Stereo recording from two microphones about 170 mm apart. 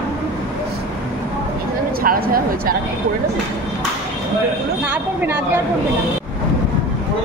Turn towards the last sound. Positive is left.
turn(degrees=-10)  # may be behind; listen again after turning